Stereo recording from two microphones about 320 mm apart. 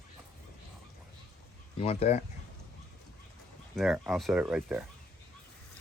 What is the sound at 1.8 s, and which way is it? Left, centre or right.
Speech, centre.